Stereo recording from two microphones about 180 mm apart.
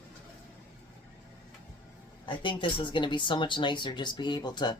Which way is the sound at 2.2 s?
25° left (ahead or behind).